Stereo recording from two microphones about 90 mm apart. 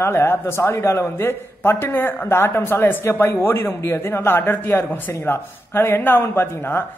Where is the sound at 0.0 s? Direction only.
25° left (ahead or behind).